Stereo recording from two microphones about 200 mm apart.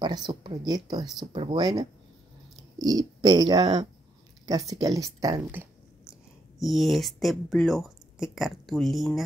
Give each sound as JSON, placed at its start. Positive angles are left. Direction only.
{"t": 0.0, "sound": "speech", "side_deg": -20}
{"t": 6.6, "sound": "speech", "side_deg": 0}